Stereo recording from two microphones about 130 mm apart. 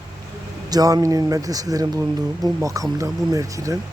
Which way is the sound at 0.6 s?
30° right (ahead or behind).